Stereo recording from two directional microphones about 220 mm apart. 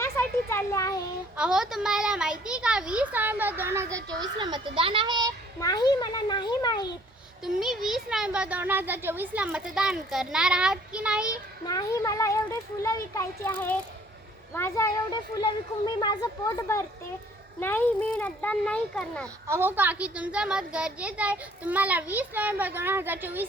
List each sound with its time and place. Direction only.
0.0 s a sound: 10° left (ahead or behind)
1.4 s a child's voice: 5° right (ahead or behind); by 5.3 s 20° right (ahead or behind)
5.5 s a child's voice: 15° left (ahead or behind)
7.4 s a child's voice: centre (ahead or behind)
11.6 s a child's voice: 15° left (ahead or behind)
19.5 s a child's voice: 10° right (ahead or behind)